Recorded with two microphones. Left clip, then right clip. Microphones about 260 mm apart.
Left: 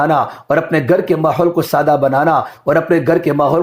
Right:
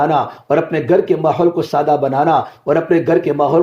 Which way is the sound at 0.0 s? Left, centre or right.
Left.